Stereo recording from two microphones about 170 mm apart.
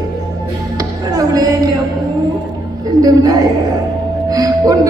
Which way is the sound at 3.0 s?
20° right (ahead or behind).